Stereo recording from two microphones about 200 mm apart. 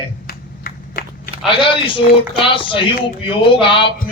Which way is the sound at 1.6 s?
25° left (ahead or behind).